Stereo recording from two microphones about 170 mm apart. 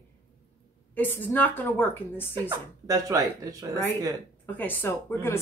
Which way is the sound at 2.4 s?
20° right (ahead or behind).